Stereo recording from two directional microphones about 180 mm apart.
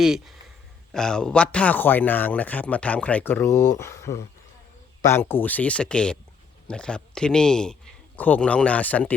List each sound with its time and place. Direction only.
0.0 s speech: centre (ahead or behind)
3.5 s speech: 45° left (ahead or behind)
3.8 s a man's voice: 15° left (ahead or behind)